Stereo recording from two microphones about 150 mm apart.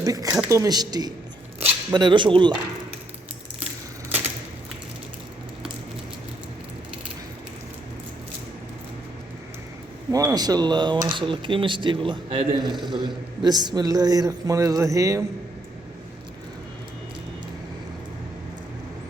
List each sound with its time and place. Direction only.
0.0 s a man's voice: 20° right (ahead or behind)
10.1 s a man's voice: 25° right (ahead or behind)